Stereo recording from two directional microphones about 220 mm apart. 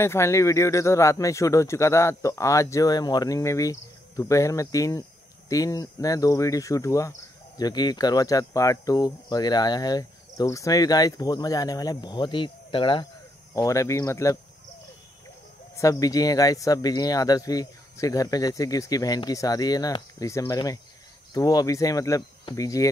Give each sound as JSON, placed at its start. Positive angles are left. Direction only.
{"t": 0.0, "sound": "speech", "side_deg": 10}
{"t": 15.7, "sound": "speech", "side_deg": 15}